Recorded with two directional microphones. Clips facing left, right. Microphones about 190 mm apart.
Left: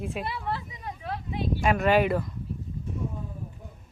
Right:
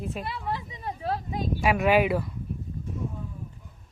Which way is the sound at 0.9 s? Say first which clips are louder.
Right 4 dB; 35° right (ahead or behind).